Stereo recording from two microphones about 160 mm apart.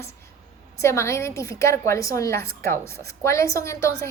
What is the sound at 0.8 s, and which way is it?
A woman's voice, 20° left (ahead or behind).